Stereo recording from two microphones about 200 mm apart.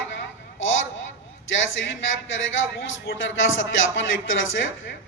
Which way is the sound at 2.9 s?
70° left (ahead or behind).